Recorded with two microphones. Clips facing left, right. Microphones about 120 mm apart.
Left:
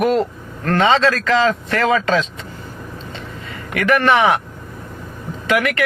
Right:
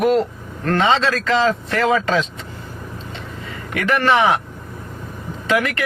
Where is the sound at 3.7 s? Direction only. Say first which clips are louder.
Left 2 dB; 25° right (ahead or behind).